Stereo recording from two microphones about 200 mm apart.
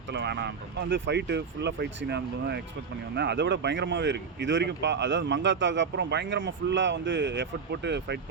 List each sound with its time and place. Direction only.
0.1 s speech: 60° right (ahead or behind)